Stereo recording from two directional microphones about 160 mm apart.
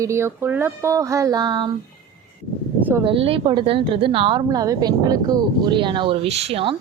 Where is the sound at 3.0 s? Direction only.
35° right (ahead or behind).